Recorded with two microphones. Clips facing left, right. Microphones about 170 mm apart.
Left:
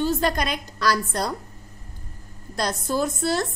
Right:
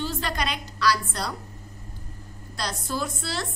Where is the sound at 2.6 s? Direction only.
45° left (ahead or behind).